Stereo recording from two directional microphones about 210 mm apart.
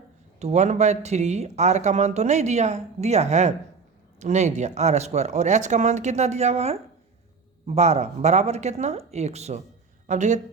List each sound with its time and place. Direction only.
0.3 s speech: 30° right (ahead or behind)